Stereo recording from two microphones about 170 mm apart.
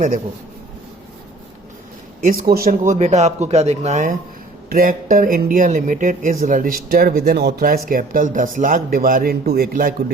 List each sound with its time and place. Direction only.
2.2 s speech: 55° right (ahead or behind)